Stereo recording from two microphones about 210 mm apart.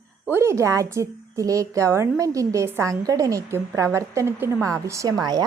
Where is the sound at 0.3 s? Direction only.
10° right (ahead or behind).